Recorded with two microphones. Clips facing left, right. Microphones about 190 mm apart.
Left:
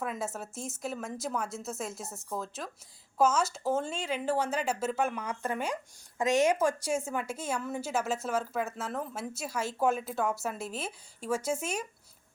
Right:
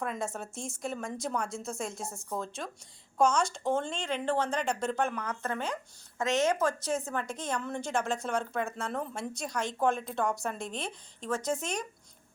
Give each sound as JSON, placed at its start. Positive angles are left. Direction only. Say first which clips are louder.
{"t": 0.0, "sound": "a woman's voice", "louder": "even", "side_deg": 5}